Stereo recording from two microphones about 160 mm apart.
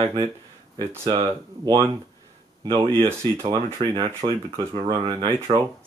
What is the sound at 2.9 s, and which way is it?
Speech, 15° right (ahead or behind).